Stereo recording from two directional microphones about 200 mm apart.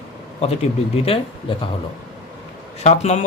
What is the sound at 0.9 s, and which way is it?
Speech, 30° left (ahead or behind).